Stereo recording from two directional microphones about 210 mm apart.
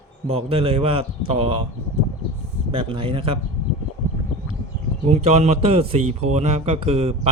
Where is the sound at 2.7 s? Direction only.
25° right (ahead or behind).